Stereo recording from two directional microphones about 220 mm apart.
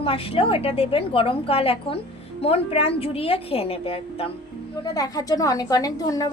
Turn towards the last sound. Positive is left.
turn(degrees=15)  # may be behind; listen again after turning